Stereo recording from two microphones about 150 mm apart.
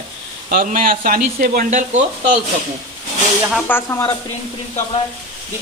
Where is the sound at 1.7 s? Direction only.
55° right (ahead or behind).